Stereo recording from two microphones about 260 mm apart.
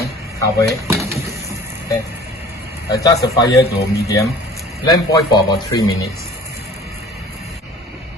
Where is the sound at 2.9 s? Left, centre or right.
Centre.